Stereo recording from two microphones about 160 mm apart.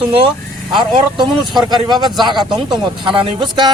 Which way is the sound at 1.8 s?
25° right (ahead or behind).